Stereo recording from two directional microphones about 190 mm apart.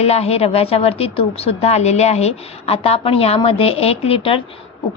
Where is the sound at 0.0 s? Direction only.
35° left (ahead or behind).